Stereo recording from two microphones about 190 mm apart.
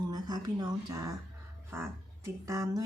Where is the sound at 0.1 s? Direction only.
20° right (ahead or behind).